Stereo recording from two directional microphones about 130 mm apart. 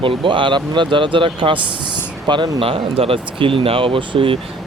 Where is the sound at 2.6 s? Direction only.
45° right (ahead or behind).